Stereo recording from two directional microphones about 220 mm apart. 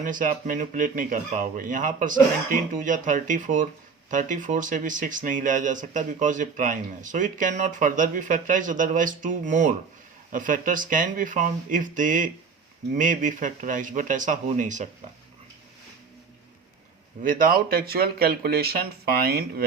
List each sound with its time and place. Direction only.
0.0 s speech: 35° right (ahead or behind)
17.2 s speech: 40° right (ahead or behind)